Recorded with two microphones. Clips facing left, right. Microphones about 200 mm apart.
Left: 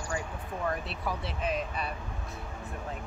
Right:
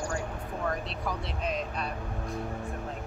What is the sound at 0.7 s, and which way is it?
Speech, 5° left (ahead or behind).